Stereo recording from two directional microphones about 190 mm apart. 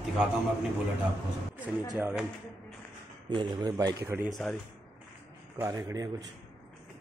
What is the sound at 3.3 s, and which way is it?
A man's voice, 25° right (ahead or behind).